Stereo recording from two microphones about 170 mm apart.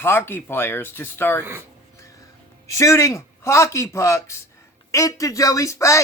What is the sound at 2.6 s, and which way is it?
Speech, 20° left (ahead or behind).